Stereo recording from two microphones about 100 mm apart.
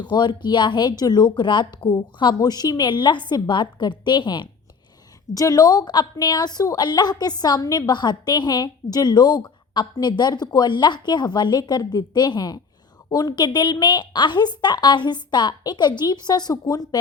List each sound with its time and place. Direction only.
0.0 s a woman's voice: 50° left (ahead or behind)
5.3 s a woman's voice: 35° left (ahead or behind)